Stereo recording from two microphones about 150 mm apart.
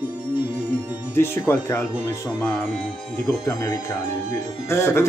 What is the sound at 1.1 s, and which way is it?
Speech, 15° left (ahead or behind).